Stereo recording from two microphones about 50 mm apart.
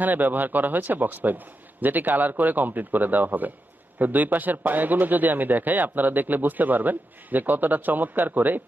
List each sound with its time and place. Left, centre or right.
0.0 s speech: right